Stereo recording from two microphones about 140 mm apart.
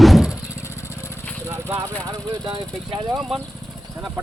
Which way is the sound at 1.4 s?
20° right (ahead or behind).